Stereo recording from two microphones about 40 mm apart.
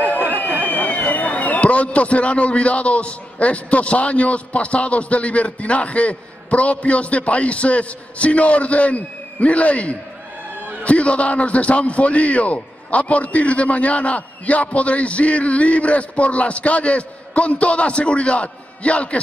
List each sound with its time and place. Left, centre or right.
0.7 s a man's voice: left